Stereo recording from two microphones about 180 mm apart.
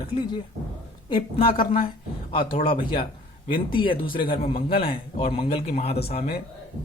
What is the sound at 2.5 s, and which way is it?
Speech, 30° left (ahead or behind).